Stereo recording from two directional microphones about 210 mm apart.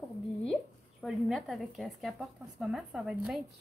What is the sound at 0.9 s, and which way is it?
A woman's voice, centre (ahead or behind).